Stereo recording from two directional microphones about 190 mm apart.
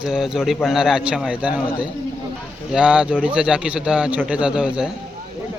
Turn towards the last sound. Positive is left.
turn(degrees=-5)  # may be behind; listen again after turning